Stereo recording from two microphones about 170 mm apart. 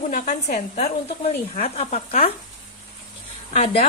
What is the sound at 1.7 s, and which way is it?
Speech, 40° left (ahead or behind).